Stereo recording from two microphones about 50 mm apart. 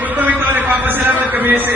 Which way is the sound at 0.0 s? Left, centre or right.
Right.